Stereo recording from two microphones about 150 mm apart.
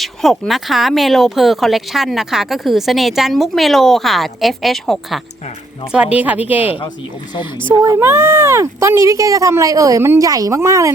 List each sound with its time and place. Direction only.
0.0 s speech: centre (ahead or behind)
6.6 s speech: 35° left (ahead or behind)
7.7 s speech: 15° right (ahead or behind)